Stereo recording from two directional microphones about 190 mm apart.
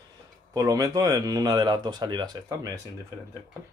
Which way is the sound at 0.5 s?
20° right (ahead or behind).